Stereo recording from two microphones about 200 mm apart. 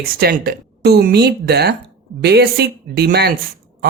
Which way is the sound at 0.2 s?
50° right (ahead or behind).